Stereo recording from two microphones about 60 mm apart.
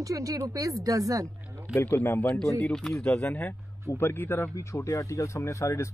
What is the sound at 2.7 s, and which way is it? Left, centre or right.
Speech, centre.